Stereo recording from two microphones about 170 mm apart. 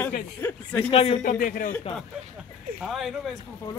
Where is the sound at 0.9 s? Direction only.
35° left (ahead or behind).